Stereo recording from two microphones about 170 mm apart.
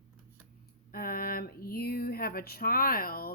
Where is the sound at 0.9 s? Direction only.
60° left (ahead or behind).